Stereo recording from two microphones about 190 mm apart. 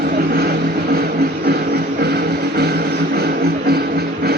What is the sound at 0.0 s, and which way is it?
Vehicle, 55° right (ahead or behind).